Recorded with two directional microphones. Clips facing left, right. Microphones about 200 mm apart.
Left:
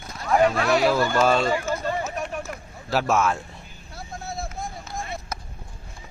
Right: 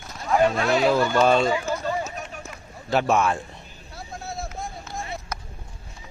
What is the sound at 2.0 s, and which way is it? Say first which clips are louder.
Run: left 3 dB; 55° left (ahead or behind).